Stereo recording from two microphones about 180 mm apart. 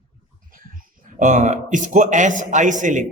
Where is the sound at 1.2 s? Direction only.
40° right (ahead or behind).